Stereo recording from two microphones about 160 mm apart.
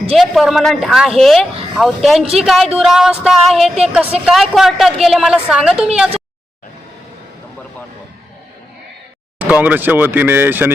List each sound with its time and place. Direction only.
0.2 s speech: centre (ahead or behind)
9.4 s speech: 10° right (ahead or behind)